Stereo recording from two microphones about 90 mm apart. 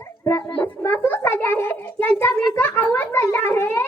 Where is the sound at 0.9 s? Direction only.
20° left (ahead or behind).